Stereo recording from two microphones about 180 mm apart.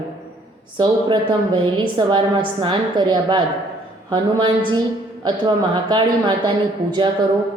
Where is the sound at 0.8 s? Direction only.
25° right (ahead or behind).